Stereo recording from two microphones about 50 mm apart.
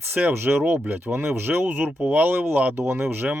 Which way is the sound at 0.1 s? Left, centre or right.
Right.